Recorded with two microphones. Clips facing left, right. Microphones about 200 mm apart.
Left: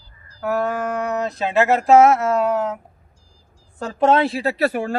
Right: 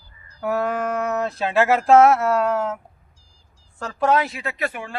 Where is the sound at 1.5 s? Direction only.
Centre (ahead or behind).